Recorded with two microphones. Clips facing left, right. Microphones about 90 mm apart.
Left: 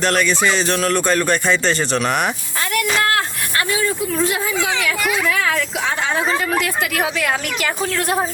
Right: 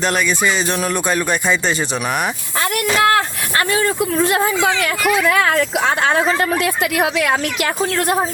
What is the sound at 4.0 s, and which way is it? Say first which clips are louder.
Speech: right 4 dB; 90° right.